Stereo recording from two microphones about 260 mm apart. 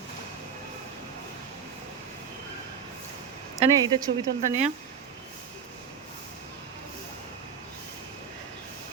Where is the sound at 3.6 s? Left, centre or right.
Centre.